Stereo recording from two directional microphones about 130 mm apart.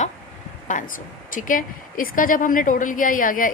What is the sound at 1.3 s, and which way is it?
A woman's voice, 90° left.